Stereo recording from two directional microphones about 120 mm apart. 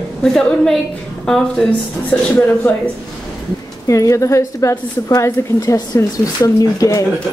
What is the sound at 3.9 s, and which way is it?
A woman's voice, 25° left (ahead or behind).